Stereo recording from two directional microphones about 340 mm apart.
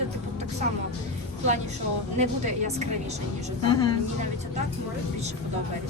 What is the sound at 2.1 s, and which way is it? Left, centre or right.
Speech, centre.